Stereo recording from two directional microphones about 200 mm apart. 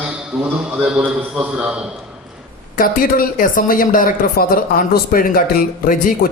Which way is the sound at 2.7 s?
45° left (ahead or behind).